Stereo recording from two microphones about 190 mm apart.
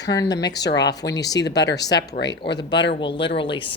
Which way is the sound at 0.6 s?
65° left (ahead or behind).